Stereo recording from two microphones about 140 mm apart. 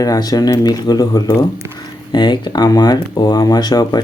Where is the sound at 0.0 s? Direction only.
25° left (ahead or behind).